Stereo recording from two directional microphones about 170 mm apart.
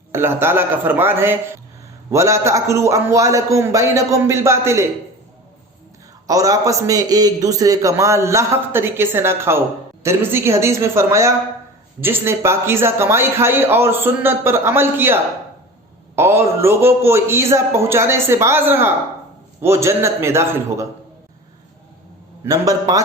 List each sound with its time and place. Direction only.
0.1 s a man's voice: 15° right (ahead or behind)
6.2 s a man's voice: 20° right (ahead or behind)
22.4 s a man's voice: 20° right (ahead or behind)